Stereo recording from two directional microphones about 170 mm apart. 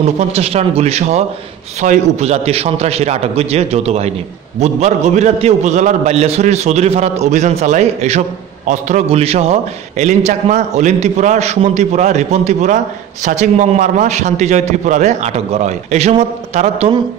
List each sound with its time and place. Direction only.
0.0 s a man's voice: 40° right (ahead or behind)